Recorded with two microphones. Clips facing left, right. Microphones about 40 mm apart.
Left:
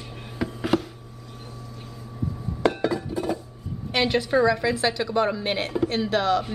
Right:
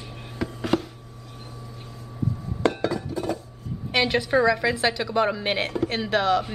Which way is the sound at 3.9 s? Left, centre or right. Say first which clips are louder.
Even; centre.